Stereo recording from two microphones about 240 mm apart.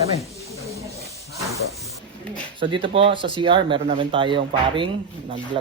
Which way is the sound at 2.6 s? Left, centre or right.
Right.